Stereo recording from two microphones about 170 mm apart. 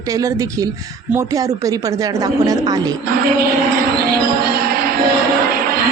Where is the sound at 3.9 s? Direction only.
65° right (ahead or behind).